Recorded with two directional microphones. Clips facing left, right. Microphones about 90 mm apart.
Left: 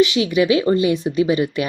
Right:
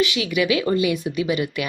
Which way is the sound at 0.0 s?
30° left (ahead or behind).